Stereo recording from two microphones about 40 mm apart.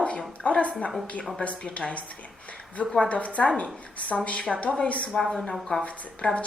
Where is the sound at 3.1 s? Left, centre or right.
Left.